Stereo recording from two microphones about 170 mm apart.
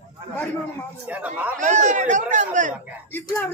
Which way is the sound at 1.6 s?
45° right (ahead or behind).